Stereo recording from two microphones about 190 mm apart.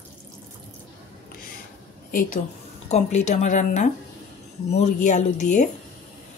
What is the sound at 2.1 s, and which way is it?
A woman's voice, 45° left (ahead or behind).